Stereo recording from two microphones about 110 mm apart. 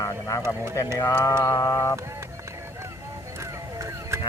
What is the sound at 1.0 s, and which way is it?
Mantra, 30° left (ahead or behind).